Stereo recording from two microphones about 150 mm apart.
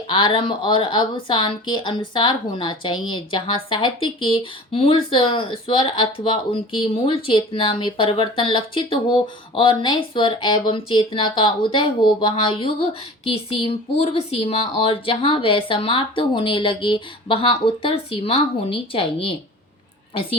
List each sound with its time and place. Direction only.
0.1 s speech: 30° left (ahead or behind)